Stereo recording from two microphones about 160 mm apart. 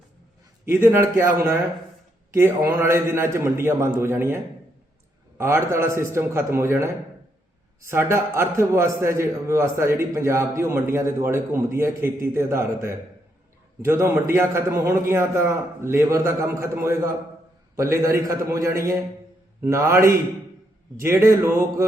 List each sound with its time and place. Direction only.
0.6 s a man's voice: 15° right (ahead or behind)
5.4 s a man's voice: 15° right (ahead or behind)